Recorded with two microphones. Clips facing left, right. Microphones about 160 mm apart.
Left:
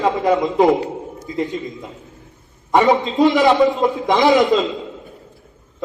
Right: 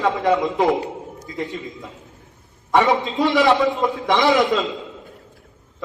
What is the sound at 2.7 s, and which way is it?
Speech, 20° left (ahead or behind).